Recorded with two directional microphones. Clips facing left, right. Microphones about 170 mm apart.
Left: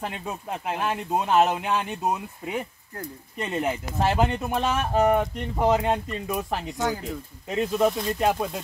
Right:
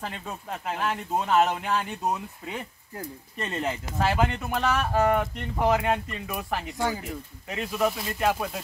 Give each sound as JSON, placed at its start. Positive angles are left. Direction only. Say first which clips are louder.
{"t": 0.0, "sound": "speech", "louder": "left 3 dB", "side_deg": 10}
{"t": 6.8, "sound": "speech", "louder": "left 2 dB", "side_deg": 0}
{"t": 7.4, "sound": "speech", "louder": "left 4 dB", "side_deg": 25}